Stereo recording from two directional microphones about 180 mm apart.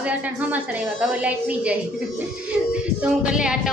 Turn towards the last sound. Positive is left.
turn(degrees=-5)  # may be behind; listen again after turning